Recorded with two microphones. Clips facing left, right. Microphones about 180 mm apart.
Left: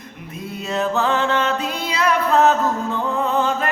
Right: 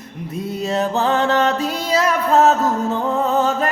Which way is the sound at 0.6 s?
35° right (ahead or behind).